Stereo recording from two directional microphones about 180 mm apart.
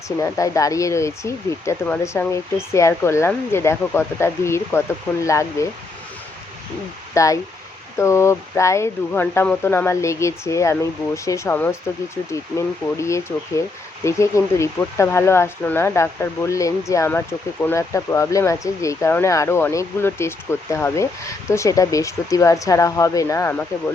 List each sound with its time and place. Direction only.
0.2 s speech: 20° left (ahead or behind)
7.1 s speech: 15° left (ahead or behind)